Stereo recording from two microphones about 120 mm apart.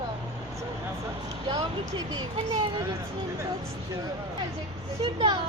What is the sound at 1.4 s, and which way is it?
Speech, 30° right (ahead or behind).